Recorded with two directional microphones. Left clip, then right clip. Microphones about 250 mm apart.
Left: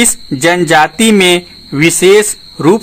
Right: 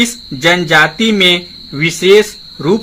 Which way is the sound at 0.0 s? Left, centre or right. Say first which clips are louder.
Left 2 dB; left.